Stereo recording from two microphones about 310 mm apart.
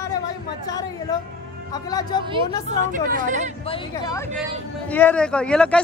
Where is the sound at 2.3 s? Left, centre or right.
Right.